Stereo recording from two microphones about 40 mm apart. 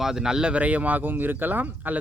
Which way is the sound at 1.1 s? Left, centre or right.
Right.